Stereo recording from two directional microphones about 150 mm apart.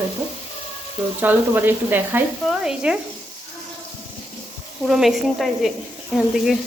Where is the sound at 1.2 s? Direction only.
15° right (ahead or behind).